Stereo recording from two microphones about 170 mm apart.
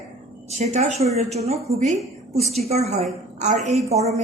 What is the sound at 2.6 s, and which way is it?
A woman's voice, 40° right (ahead or behind).